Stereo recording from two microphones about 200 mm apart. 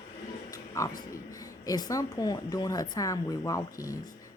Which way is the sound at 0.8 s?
15° left (ahead or behind).